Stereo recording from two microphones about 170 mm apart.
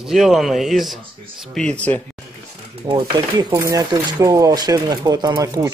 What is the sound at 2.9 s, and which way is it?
Speech, 25° right (ahead or behind).